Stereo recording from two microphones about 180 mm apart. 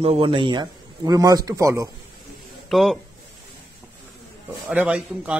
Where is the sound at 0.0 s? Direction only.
30° right (ahead or behind).